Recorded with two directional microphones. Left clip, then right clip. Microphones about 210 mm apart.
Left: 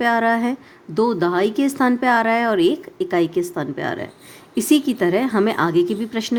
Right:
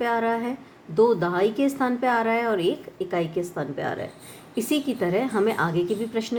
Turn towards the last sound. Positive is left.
turn(degrees=40)  # may be behind; listen again after turning